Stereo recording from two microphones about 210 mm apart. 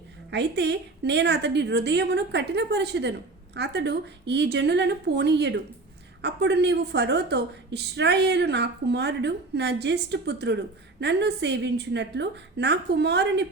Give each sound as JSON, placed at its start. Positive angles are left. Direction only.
{"t": 0.3, "sound": "a woman's voice", "side_deg": -55}